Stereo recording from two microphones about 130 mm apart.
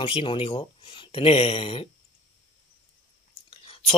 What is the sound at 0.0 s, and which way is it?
Speech, 45° left (ahead or behind).